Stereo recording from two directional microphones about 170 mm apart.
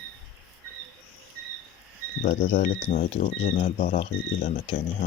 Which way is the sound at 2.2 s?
55° left (ahead or behind).